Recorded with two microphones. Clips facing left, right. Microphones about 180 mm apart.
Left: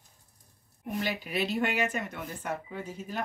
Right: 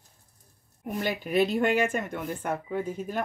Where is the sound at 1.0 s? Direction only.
50° right (ahead or behind).